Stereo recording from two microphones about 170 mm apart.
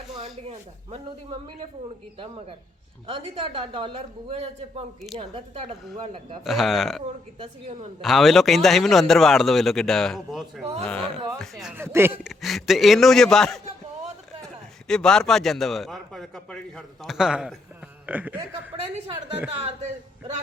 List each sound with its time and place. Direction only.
0.4 s a woman's voice: 35° right (ahead or behind)
6.4 s a man's voice: centre (ahead or behind)
7.3 s a woman's voice: 35° right (ahead or behind)
8.0 s a man's voice: centre (ahead or behind)
11.8 s speech: 15° right (ahead or behind)
12.4 s a man's voice: centre (ahead or behind)
14.8 s a man's voice: 5° left (ahead or behind)
19.5 s a woman's voice: 35° right (ahead or behind)